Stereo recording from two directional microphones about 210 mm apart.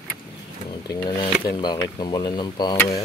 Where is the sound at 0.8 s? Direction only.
15° left (ahead or behind).